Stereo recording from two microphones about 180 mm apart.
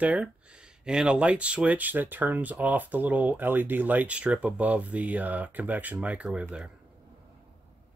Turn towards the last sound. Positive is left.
turn(degrees=-5)  # may be behind; listen again after turning